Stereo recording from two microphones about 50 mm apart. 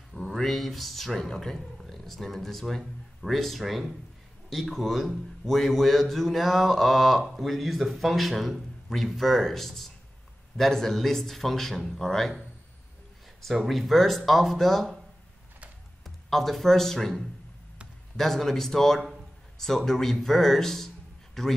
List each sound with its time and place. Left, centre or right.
0.1 s a man's voice: centre
13.7 s a man's voice: centre
16.0 s speech: centre